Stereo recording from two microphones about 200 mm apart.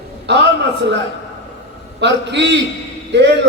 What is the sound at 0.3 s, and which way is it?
Speech, 55° right (ahead or behind).